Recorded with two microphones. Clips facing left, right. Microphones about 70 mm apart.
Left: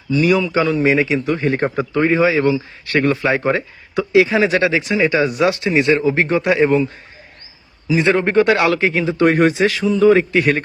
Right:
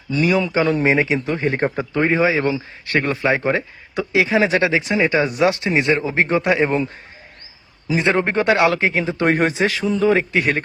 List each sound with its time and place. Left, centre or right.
0.2 s speech: right
0.7 s speech: right
0.9 s speech: right
7.9 s speech: right